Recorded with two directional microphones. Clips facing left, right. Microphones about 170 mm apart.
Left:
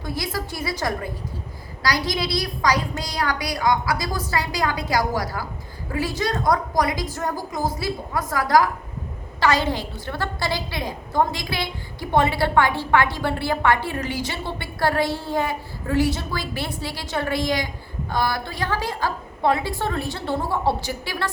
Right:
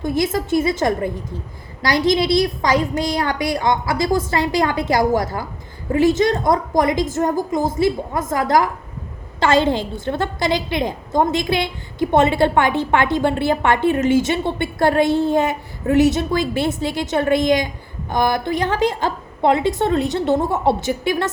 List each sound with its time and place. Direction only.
0.0 s a woman's voice: 20° right (ahead or behind)